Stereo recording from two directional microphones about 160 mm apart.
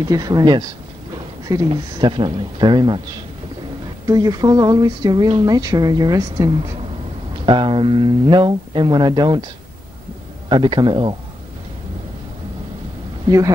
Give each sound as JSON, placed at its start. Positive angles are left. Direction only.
{"t": 0.1, "sound": "speech", "side_deg": -25}
{"t": 4.1, "sound": "speech", "side_deg": -20}
{"t": 10.5, "sound": "speech", "side_deg": -30}